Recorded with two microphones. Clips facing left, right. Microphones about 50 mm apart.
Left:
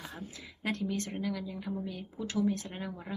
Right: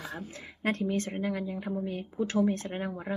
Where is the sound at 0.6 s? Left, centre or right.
Right.